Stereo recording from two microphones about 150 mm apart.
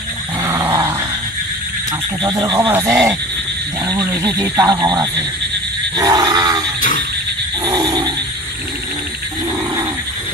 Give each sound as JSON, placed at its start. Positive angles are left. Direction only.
{"t": 0.4, "sound": "dog", "side_deg": -15}
{"t": 2.2, "sound": "speech", "side_deg": -20}
{"t": 6.8, "sound": "frog", "side_deg": 65}
{"t": 7.6, "sound": "a sound", "side_deg": -25}